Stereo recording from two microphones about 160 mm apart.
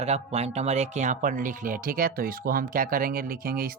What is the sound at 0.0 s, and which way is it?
Speech, 40° right (ahead or behind).